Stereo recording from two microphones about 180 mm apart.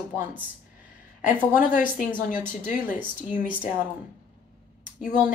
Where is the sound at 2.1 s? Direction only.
45° left (ahead or behind).